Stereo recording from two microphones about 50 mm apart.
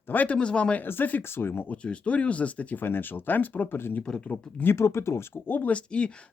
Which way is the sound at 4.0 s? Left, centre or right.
Left.